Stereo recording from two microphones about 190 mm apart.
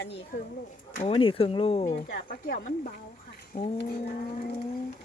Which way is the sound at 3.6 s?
30° left (ahead or behind).